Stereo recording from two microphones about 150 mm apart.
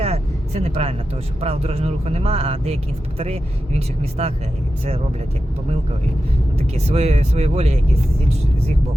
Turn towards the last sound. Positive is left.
turn(degrees=-45)  # may be behind; listen again after turning